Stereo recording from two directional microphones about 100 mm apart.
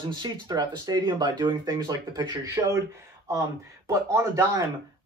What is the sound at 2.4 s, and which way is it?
Speech, 30° right (ahead or behind).